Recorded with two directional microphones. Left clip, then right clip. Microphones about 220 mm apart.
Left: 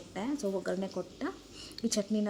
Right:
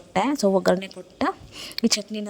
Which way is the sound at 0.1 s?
45° right (ahead or behind).